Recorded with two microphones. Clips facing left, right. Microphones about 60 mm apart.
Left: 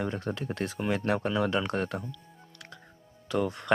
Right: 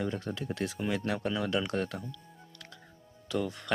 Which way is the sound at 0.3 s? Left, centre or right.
Left.